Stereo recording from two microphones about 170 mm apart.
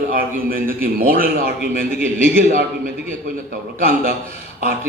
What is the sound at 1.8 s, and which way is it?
Speech, 45° left (ahead or behind).